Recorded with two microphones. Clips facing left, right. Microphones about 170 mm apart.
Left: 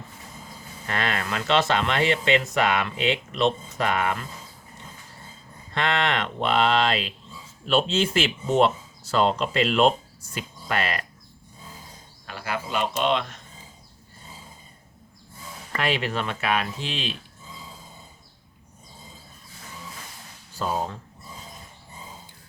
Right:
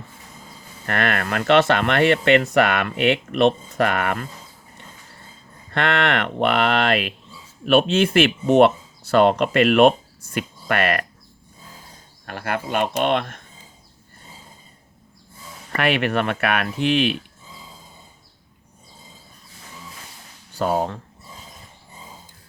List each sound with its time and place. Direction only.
0.9 s speech: 60° right (ahead or behind)
5.7 s speech: 60° right (ahead or behind)
12.2 s speech: 55° right (ahead or behind)
15.7 s speech: 65° right (ahead or behind)
20.6 s speech: 60° right (ahead or behind)